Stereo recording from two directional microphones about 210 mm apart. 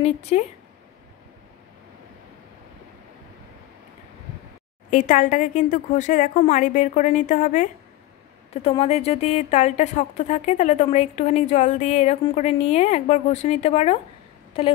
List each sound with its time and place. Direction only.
0.0 s speech: 30° left (ahead or behind)
4.9 s speech: 35° left (ahead or behind)